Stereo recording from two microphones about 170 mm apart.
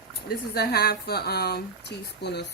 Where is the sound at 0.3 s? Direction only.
65° left (ahead or behind).